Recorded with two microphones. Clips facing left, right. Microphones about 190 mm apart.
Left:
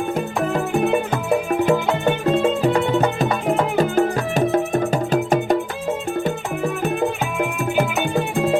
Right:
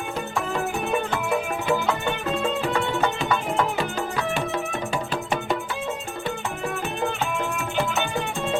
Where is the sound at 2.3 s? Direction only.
40° left (ahead or behind).